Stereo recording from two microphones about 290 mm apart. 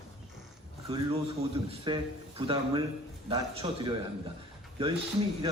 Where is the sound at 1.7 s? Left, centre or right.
Centre.